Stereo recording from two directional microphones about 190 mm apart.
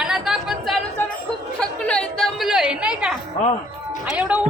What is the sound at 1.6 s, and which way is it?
Chatter, 5° left (ahead or behind).